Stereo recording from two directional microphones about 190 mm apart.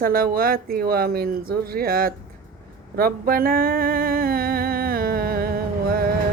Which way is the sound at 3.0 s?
50° right (ahead or behind).